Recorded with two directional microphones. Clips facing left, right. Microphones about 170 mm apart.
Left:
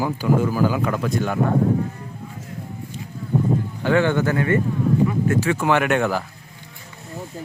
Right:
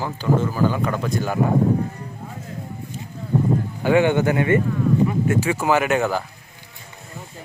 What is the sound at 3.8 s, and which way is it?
Speech, 15° right (ahead or behind).